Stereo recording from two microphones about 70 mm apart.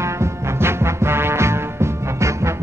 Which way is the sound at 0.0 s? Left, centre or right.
Right.